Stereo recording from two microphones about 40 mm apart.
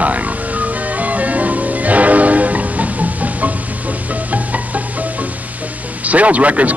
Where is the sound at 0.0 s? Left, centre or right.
Right.